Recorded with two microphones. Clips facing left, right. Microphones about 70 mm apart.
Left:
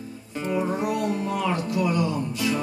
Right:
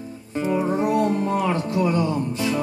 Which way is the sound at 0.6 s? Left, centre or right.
Right.